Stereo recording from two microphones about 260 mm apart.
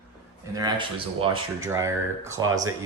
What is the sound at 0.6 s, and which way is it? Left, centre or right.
Speech, centre.